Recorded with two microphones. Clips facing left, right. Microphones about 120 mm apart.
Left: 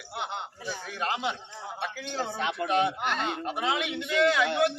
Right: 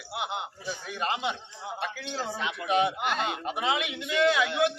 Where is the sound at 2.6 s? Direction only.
5° right (ahead or behind).